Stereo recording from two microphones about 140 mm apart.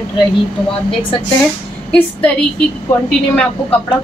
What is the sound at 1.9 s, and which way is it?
Speech, 5° left (ahead or behind).